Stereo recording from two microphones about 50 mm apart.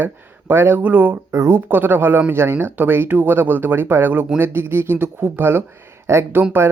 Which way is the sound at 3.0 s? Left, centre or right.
Right.